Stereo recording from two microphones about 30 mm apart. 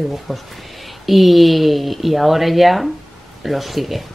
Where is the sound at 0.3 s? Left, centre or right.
Centre.